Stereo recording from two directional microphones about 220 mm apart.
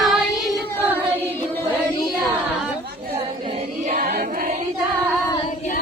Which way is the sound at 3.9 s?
35° right (ahead or behind).